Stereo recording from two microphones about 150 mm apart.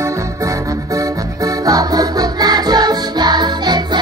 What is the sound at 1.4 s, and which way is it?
Music, 25° right (ahead or behind).